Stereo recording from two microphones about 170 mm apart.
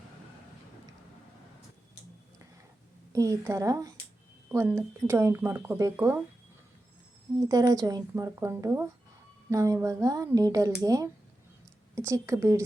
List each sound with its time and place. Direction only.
3.1 s a woman's voice: 20° right (ahead or behind)
7.3 s a woman's voice: 20° right (ahead or behind)